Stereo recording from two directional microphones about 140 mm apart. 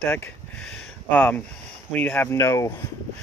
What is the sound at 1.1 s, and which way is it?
Speech, 10° left (ahead or behind).